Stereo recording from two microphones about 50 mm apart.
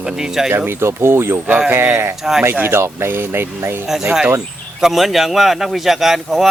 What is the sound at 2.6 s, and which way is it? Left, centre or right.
Speech, right.